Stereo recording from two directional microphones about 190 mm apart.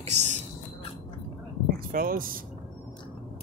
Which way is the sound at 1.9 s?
50° right (ahead or behind).